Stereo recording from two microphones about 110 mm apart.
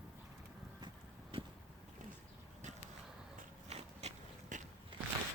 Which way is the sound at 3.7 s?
70° right (ahead or behind).